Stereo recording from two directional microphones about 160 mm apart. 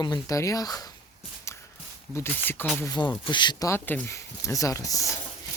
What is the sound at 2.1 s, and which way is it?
Speech, 15° left (ahead or behind).